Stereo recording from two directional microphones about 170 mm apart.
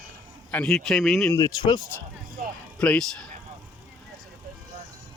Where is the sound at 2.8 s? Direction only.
5° left (ahead or behind).